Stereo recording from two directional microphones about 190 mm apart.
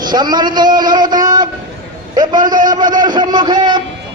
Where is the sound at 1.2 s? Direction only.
20° right (ahead or behind).